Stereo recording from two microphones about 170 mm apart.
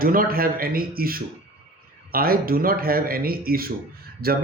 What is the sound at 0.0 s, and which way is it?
A man's voice, 60° right (ahead or behind).